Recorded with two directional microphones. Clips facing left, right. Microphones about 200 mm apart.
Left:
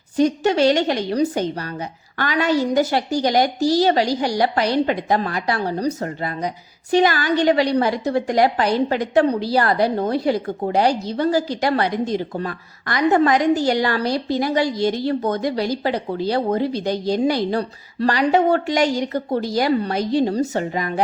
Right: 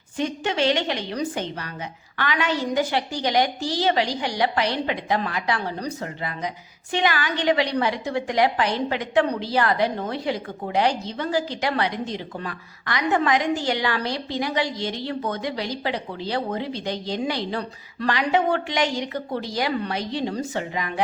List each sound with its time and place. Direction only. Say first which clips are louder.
0.2 s a woman's voice: left 8 dB; 40° left (ahead or behind)